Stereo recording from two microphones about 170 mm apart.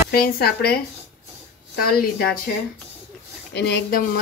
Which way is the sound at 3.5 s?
75° left (ahead or behind).